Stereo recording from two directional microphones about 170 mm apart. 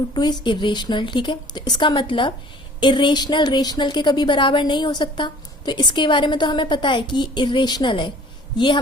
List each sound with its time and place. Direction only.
0.1 s a woman's voice: 25° left (ahead or behind)